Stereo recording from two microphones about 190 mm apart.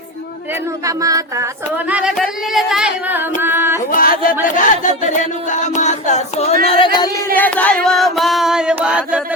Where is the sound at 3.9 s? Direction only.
50° left (ahead or behind).